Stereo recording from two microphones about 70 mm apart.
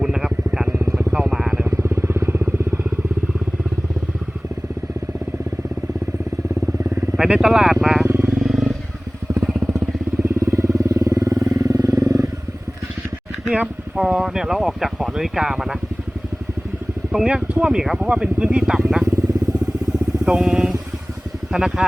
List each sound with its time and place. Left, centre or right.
0.0 s vehicle: centre
1.7 s vehicle: right
6.8 s vehicle: right
7.2 s speech: centre
8.0 s vehicle: right
8.3 s wild animals: centre
10.2 s vehicle: right
13.5 s speech: centre
17.1 s speech: centre
19.0 s motorcycle: right
20.2 s speech: centre